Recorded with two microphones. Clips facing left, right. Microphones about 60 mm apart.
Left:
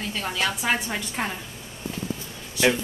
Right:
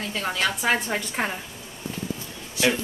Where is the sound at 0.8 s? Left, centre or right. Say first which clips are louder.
Right 2 dB; centre.